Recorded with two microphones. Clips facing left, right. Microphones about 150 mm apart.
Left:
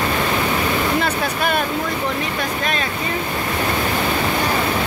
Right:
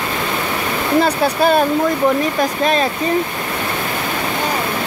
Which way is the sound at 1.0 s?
35° right (ahead or behind).